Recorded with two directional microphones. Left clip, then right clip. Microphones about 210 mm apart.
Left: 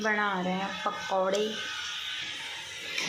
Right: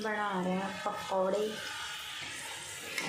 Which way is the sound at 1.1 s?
15° left (ahead or behind).